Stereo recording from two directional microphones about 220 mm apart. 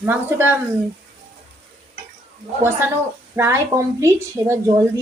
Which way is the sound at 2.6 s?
10° right (ahead or behind).